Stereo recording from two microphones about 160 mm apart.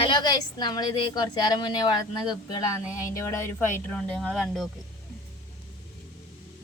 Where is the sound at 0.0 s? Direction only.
30° left (ahead or behind); by 4.7 s centre (ahead or behind).